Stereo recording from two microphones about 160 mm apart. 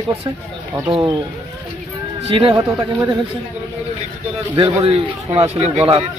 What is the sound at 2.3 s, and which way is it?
Speech, 35° right (ahead or behind).